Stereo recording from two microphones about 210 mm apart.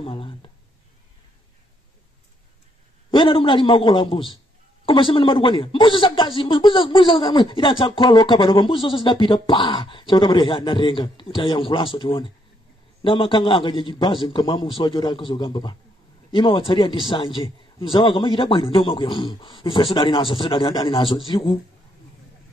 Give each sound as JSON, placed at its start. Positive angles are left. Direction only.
{"t": 0.0, "sound": "speech", "side_deg": 25}
{"t": 3.1, "sound": "speech", "side_deg": 25}